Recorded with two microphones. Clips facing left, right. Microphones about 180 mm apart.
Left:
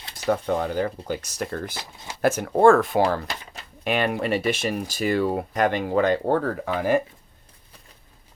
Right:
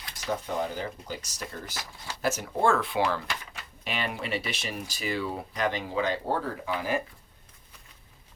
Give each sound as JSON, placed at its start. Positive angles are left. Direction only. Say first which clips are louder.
{"t": 0.3, "sound": "speech", "louder": "left 7 dB", "side_deg": 60}
{"t": 1.7, "sound": "speech", "louder": "left 2 dB", "side_deg": 20}
{"t": 2.2, "sound": "speech", "louder": "left 9 dB", "side_deg": 55}
{"t": 3.8, "sound": "speech", "louder": "left 9 dB", "side_deg": 55}